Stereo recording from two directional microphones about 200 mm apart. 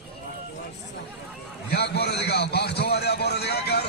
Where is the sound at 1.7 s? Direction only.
55° left (ahead or behind).